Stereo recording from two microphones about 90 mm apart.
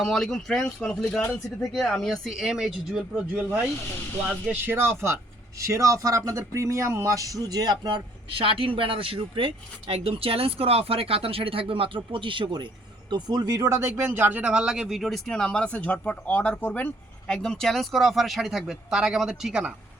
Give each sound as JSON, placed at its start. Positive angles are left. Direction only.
{"t": 0.0, "sound": "speech", "side_deg": 5}
{"t": 4.6, "sound": "speech", "side_deg": -25}
{"t": 8.4, "sound": "speech", "side_deg": -85}
{"t": 13.1, "sound": "speech", "side_deg": -50}
{"t": 14.1, "sound": "speech", "side_deg": -20}
{"t": 17.2, "sound": "speech", "side_deg": 10}